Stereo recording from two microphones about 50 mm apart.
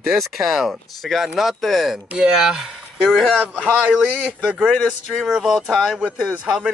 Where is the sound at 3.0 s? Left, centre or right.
Centre.